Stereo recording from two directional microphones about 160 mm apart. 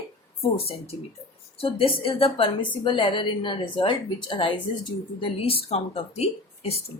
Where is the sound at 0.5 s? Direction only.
40° left (ahead or behind).